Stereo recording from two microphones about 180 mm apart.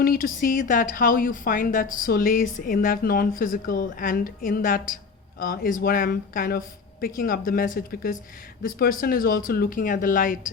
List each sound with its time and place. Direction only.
0.0 s a woman's voice: 55° left (ahead or behind)